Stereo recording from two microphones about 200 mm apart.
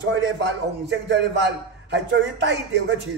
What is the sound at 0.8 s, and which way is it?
A man's voice, 60° right (ahead or behind).